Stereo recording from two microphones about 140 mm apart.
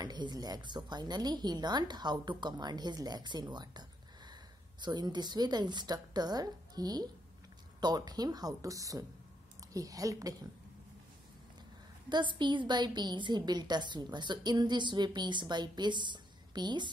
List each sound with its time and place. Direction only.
0.0 s a woman's voice: 30° right (ahead or behind)
12.1 s a woman's voice: 35° right (ahead or behind)